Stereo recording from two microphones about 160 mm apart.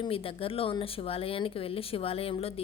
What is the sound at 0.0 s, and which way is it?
A woman's voice, 35° left (ahead or behind).